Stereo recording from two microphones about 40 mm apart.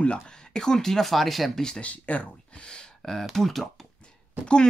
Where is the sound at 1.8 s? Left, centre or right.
Left.